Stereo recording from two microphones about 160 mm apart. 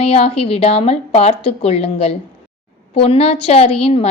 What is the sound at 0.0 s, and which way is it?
A woman's voice, 40° left (ahead or behind).